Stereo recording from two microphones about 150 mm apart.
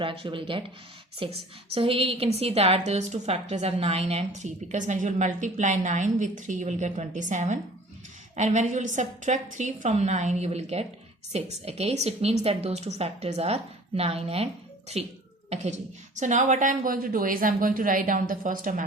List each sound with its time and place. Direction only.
0.0 s a woman's voice: 35° right (ahead or behind); by 18.9 s 65° right (ahead or behind)